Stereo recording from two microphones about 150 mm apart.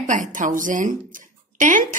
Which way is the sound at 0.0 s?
60° right (ahead or behind).